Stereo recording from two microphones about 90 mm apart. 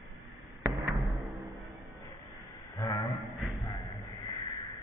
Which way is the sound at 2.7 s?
65° left (ahead or behind).